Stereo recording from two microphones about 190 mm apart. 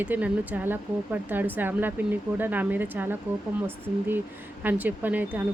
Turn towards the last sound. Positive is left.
turn(degrees=-10)  # may be behind; listen again after turning